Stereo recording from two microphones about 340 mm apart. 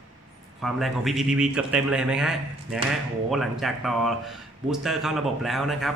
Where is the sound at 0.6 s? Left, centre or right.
Centre.